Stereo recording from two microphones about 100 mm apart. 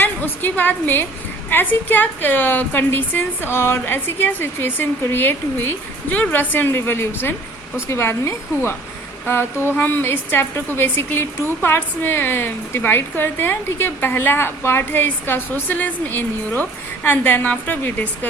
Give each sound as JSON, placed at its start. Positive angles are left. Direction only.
{"t": 0.0, "sound": "a woman's voice", "side_deg": 15}